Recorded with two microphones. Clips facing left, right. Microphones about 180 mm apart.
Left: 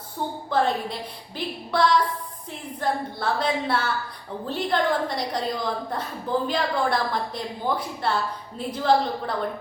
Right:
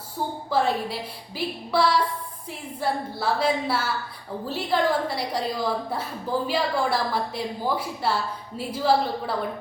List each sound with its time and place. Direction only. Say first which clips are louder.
0.5 s a woman's voice: even; 5° right (ahead or behind)